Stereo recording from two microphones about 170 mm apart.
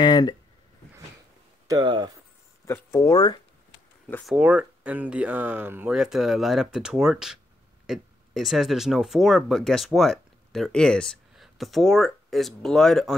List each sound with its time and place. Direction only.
0.0 s speech: 25° left (ahead or behind)
1.8 s speech: 25° right (ahead or behind)
2.6 s speech: 15° left (ahead or behind)
4.3 s speech: 10° right (ahead or behind)